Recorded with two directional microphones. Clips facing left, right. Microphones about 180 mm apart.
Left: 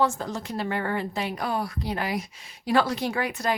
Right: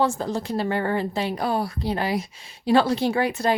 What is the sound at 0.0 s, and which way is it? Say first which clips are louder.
A woman's voice: right 3 dB; 30° right (ahead or behind).